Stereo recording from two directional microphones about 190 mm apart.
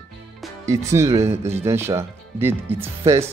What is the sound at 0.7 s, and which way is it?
Speech, 15° right (ahead or behind).